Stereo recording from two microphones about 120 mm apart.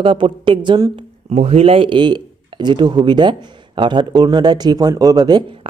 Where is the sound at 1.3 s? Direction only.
65° right (ahead or behind).